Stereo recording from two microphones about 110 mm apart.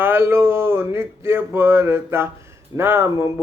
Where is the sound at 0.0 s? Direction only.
20° right (ahead or behind).